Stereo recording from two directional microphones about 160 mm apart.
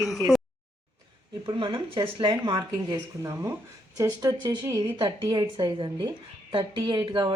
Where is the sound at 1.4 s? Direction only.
30° right (ahead or behind).